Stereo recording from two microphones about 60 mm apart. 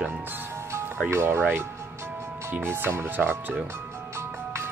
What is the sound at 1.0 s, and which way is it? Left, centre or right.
Speech, right.